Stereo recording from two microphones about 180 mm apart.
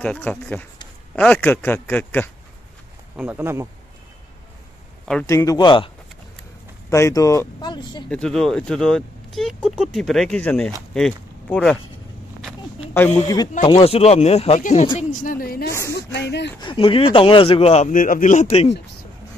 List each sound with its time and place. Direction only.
0.0 s a man's voice: 5° left (ahead or behind)
3.2 s speech: 10° right (ahead or behind)
5.3 s speech: 20° left (ahead or behind)
6.9 s a man's voice: 15° left (ahead or behind)
8.1 s speech: 5° left (ahead or behind)
13.7 s speech: 30° left (ahead or behind)
15.0 s a sound: 45° left (ahead or behind)
15.9 s speech: 70° left (ahead or behind)
16.6 s speech: 30° left (ahead or behind)